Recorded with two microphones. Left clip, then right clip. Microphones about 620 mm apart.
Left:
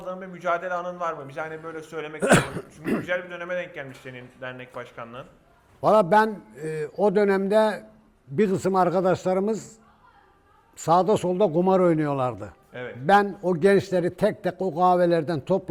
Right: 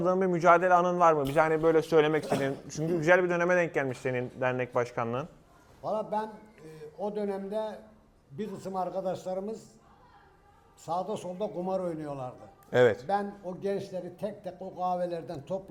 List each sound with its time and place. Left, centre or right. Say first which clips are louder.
0.0 s a man's voice: right 6 dB; right
5.8 s a man's voice: left 14 dB; left
10.8 s a man's voice: left 13 dB; left